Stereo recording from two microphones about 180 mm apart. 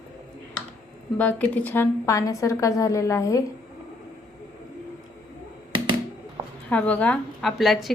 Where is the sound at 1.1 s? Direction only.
10° left (ahead or behind).